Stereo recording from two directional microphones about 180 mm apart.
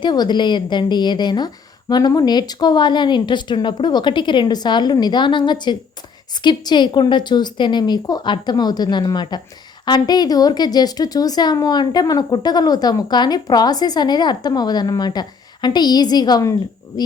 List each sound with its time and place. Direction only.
0.0 s a woman's voice: 25° left (ahead or behind)